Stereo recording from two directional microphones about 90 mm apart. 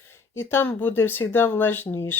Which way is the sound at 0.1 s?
25° left (ahead or behind).